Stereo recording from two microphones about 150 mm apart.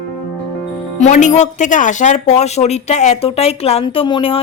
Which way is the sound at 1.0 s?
55° left (ahead or behind).